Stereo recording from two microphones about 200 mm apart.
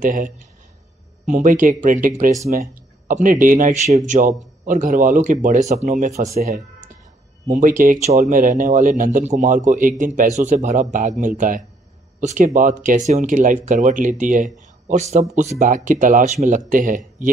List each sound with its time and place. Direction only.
0.0 s speech: 40° right (ahead or behind)
6.4 s speech: 50° right (ahead or behind)